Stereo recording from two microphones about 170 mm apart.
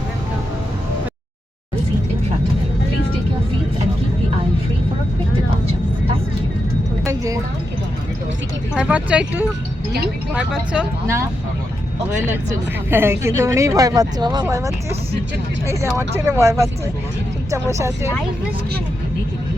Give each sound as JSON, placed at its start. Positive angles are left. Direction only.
{"t": 7.0, "sound": "a sound", "side_deg": -15}
{"t": 8.7, "sound": "speech", "side_deg": -5}
{"t": 12.3, "sound": "speech", "side_deg": -15}